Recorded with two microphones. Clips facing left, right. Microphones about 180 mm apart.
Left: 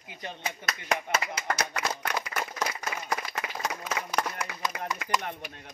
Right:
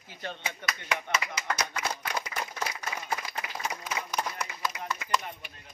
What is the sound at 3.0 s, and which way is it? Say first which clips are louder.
Clapping: left 2 dB; 80° left.